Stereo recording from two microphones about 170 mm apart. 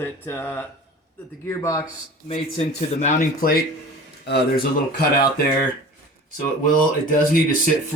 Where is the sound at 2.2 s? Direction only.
35° left (ahead or behind).